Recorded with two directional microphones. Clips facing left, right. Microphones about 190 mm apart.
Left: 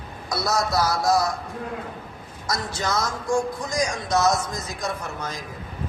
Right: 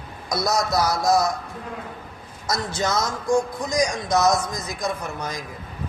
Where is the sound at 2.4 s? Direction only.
20° right (ahead or behind).